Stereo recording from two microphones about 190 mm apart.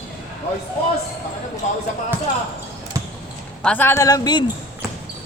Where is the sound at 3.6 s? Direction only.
10° left (ahead or behind).